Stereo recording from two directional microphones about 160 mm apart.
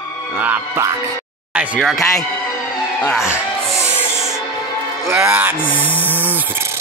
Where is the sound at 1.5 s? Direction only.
10° right (ahead or behind).